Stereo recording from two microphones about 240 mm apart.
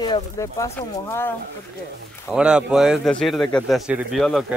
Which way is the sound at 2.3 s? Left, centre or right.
Centre.